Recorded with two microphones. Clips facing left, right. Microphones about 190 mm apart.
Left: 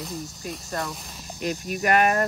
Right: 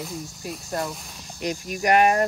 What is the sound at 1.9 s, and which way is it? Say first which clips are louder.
Speech: right 2 dB; 60° left (ahead or behind).